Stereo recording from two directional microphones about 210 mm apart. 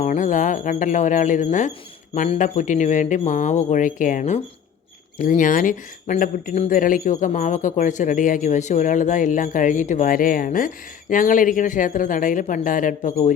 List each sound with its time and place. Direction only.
0.0 s speech: 35° left (ahead or behind)